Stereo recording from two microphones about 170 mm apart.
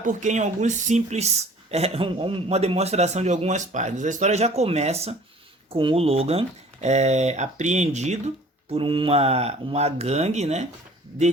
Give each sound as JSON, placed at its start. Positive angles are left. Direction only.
{"t": 0.0, "sound": "speech", "side_deg": -45}
{"t": 8.7, "sound": "speech", "side_deg": -30}